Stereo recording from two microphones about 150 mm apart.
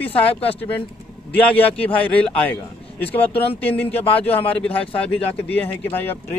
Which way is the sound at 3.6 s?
10° left (ahead or behind).